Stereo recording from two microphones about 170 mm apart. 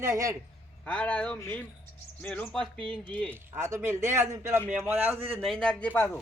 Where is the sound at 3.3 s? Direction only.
15° right (ahead or behind).